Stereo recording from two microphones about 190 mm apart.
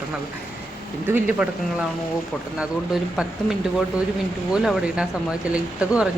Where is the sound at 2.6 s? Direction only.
5° right (ahead or behind).